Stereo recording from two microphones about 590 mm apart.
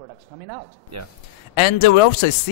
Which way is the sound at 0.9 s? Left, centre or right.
Right.